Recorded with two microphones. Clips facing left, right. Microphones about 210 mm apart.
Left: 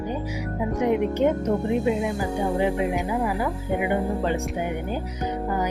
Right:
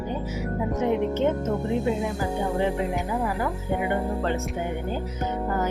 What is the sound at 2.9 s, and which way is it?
Speech, 10° left (ahead or behind).